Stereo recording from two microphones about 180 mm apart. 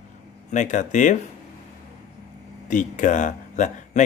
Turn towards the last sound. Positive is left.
turn(degrees=45)  # may be behind; listen again after turning